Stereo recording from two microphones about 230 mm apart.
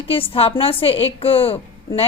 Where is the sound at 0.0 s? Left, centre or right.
Left.